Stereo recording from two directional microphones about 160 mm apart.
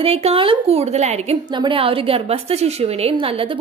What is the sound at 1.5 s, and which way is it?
A woman's voice, 30° right (ahead or behind).